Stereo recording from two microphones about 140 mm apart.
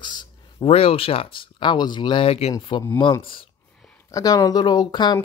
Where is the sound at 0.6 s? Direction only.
45° left (ahead or behind).